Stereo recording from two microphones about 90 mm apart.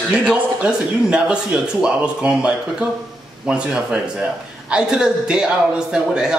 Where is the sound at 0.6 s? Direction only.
10° right (ahead or behind).